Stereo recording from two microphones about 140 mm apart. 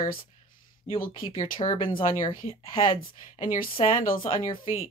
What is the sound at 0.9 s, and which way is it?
Speech, 85° left.